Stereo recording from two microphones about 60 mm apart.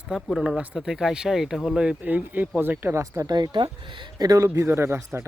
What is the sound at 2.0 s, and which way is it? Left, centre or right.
Speech, right.